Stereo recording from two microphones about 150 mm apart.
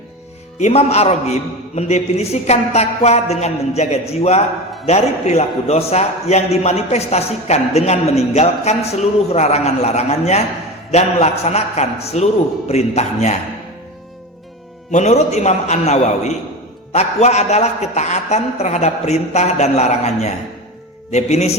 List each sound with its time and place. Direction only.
0.6 s a man's voice: 45° left (ahead or behind)
14.9 s a man's voice: 50° left (ahead or behind)